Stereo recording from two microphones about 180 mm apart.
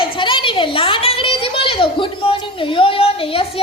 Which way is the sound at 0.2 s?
25° left (ahead or behind).